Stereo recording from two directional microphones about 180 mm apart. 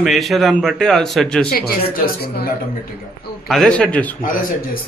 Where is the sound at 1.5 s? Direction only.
55° left (ahead or behind).